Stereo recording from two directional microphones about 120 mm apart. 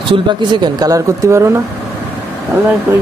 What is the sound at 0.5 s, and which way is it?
Speech, 35° right (ahead or behind).